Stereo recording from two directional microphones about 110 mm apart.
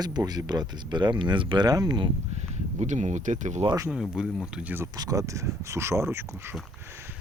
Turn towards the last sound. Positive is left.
turn(degrees=-25)  # may be behind; listen again after turning